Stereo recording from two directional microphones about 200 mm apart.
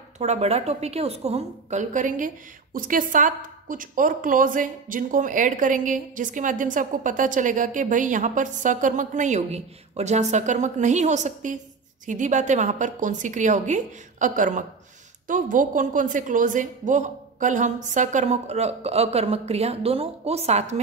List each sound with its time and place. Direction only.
0.2 s a woman's voice: 30° right (ahead or behind)